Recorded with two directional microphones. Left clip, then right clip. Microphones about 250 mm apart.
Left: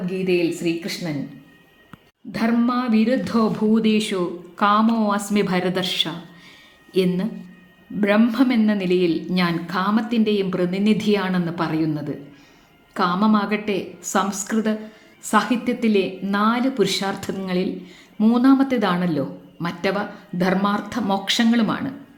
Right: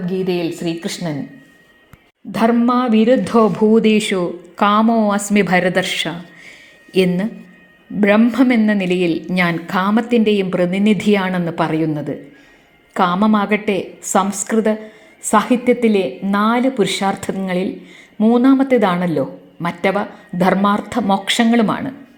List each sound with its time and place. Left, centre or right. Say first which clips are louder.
0.3 s speech: left 4 dB; centre
2.3 s a woman's voice: right 7 dB; right